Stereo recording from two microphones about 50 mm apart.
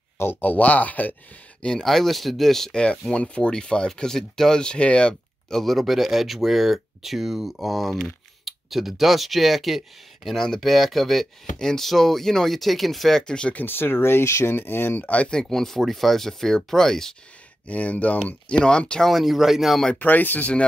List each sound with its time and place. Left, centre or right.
0.2 s speech: left
0.5 s speech: left
1.6 s speech: centre
1.9 s speech: centre
2.7 s speech: left
5.6 s speech: centre
13.3 s speech: centre
13.6 s speech: left
15.0 s speech: left
15.3 s speech: centre
17.6 s speech: left
18.5 s speech: centre
18.9 s speech: centre
20.0 s speech: left